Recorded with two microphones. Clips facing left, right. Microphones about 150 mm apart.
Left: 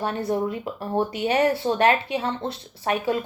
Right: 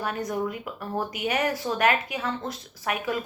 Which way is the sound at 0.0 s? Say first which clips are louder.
Left 4 dB; 30° left (ahead or behind).